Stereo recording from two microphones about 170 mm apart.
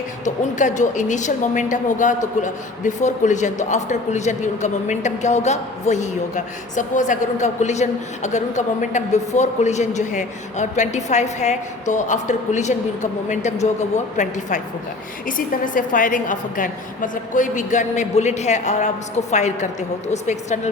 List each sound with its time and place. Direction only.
0.6 s a woman's voice: 45° left (ahead or behind)